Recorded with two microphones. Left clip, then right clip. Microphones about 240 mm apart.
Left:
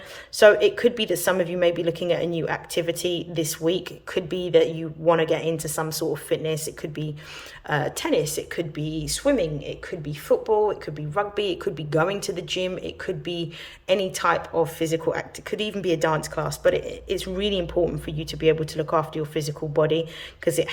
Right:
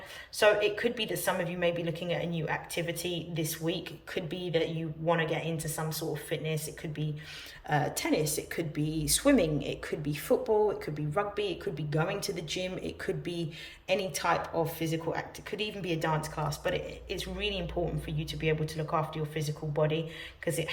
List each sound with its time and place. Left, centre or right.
0.3 s a man's voice: left